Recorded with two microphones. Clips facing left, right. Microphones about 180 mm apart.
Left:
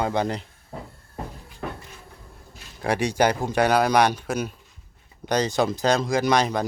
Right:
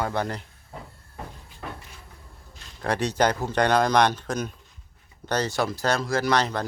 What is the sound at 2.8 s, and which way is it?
Speech, 10° left (ahead or behind).